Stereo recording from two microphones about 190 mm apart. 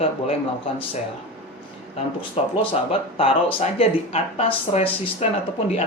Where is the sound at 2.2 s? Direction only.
25° left (ahead or behind).